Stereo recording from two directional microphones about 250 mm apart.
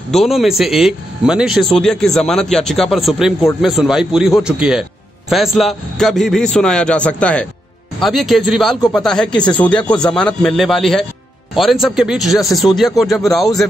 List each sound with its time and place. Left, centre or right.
0.1 s a man's voice: centre